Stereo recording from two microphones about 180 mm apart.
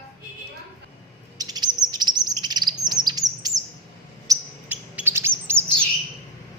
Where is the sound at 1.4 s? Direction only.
20° right (ahead or behind).